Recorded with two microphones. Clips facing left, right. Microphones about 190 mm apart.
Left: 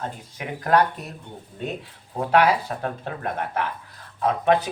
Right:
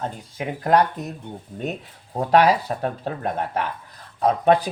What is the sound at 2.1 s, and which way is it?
Speech, 35° right (ahead or behind).